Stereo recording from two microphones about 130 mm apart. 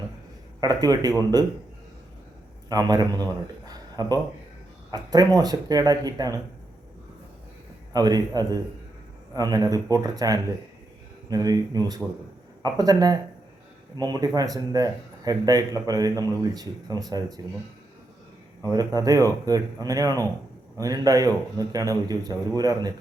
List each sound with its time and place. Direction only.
0.6 s speech: 30° right (ahead or behind)
2.6 s speech: 30° right (ahead or behind)
7.9 s speech: 30° right (ahead or behind)
18.7 s speech: 30° right (ahead or behind)